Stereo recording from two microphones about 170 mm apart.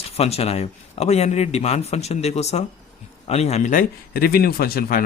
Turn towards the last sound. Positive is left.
turn(degrees=60)  # may be behind; listen again after turning